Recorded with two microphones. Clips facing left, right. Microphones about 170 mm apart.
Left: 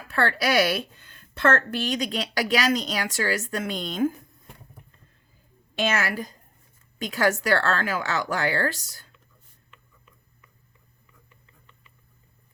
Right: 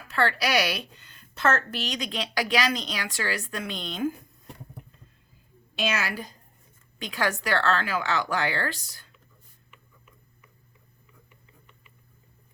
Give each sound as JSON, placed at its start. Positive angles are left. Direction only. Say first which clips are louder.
{"t": 0.1, "sound": "a woman's voice", "louder": "left 1 dB", "side_deg": 50}
{"t": 7.0, "sound": "a woman's voice", "louder": "left 5 dB", "side_deg": 45}